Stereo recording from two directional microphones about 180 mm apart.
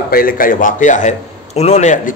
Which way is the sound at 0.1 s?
55° left (ahead or behind).